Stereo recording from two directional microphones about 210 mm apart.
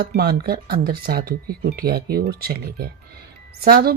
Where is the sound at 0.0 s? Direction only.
50° right (ahead or behind).